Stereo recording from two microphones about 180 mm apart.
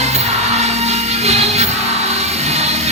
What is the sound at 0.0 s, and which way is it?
Music, 35° right (ahead or behind).